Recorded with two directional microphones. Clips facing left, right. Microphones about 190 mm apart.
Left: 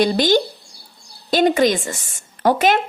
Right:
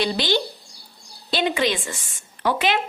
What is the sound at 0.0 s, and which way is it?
A woman's voice, 45° left (ahead or behind).